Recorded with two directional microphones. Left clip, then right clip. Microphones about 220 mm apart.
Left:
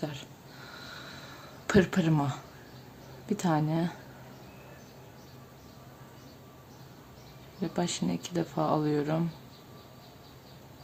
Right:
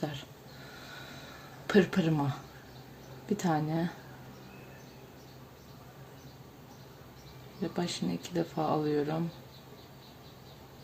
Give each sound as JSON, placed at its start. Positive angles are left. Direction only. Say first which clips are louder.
{"t": 1.6, "sound": "speech", "louder": "left 1 dB", "side_deg": 15}
{"t": 7.6, "sound": "speech", "louder": "left 2 dB", "side_deg": 15}